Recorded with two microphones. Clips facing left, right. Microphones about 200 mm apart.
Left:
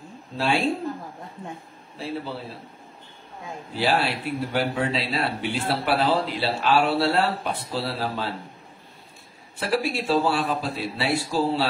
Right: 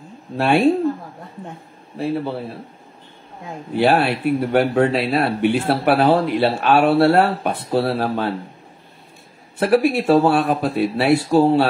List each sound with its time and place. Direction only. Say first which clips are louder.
0.4 s speech: right 7 dB; 60° right (ahead or behind)
2.0 s speech: right 9 dB; 60° right (ahead or behind)
3.7 s speech: right 7 dB; 60° right (ahead or behind)
9.6 s speech: right 9 dB; 55° right (ahead or behind)